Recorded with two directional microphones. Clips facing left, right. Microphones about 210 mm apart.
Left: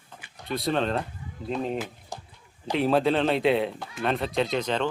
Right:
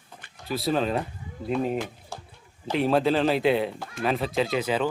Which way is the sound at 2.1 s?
15° left (ahead or behind).